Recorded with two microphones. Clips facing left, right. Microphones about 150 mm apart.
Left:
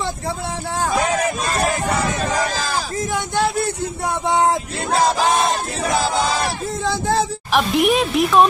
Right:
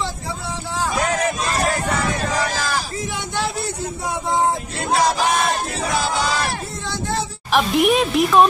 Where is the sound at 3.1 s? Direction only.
50° left (ahead or behind); by 4.5 s 70° left (ahead or behind).